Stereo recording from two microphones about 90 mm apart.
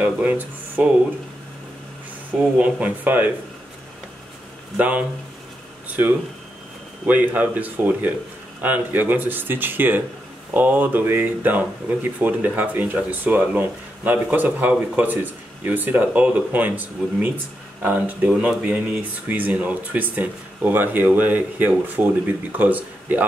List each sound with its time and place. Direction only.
0.0 s speech: 20° right (ahead or behind)
2.6 s speech: 20° right (ahead or behind)
4.7 s speech: 15° right (ahead or behind)